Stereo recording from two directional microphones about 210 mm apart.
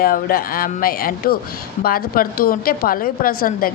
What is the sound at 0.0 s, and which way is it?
Speech, 45° left (ahead or behind).